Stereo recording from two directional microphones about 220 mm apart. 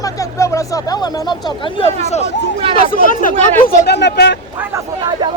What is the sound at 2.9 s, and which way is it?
Speech, 40° left (ahead or behind).